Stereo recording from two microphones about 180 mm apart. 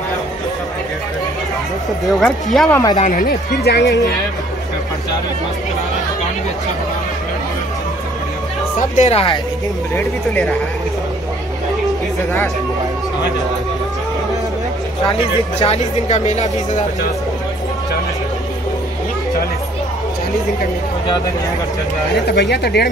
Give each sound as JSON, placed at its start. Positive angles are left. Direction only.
{"t": 2.0, "sound": "speech", "side_deg": 0}
{"t": 2.7, "sound": "speech", "side_deg": 20}
{"t": 3.0, "sound": "speech", "side_deg": 50}
{"t": 8.7, "sound": "speech", "side_deg": 40}
{"t": 9.9, "sound": "speech", "side_deg": 10}
{"t": 16.1, "sound": "speech", "side_deg": 40}
{"t": 22.3, "sound": "speech", "side_deg": 70}